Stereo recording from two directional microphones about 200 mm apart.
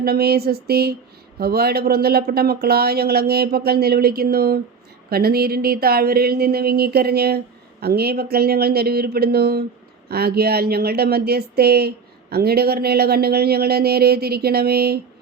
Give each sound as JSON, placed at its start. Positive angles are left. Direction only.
{"t": 0.0, "sound": "speech", "side_deg": -50}